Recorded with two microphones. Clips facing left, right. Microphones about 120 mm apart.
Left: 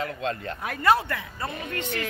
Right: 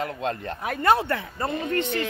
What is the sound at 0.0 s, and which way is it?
Speech, 25° right (ahead or behind).